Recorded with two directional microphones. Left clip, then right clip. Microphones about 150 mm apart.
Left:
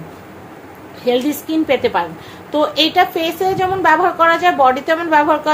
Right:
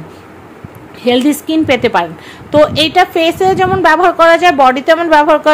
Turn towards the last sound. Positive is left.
turn(degrees=-50)  # may be behind; listen again after turning